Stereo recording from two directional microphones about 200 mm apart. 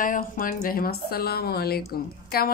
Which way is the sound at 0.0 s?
45° left (ahead or behind).